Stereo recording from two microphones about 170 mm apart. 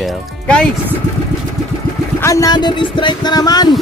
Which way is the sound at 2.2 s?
20° left (ahead or behind).